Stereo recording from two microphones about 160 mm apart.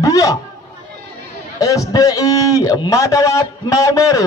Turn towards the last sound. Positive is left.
turn(degrees=20)  # may be behind; listen again after turning